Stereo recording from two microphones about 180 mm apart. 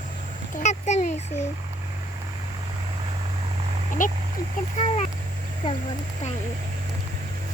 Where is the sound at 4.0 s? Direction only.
45° left (ahead or behind).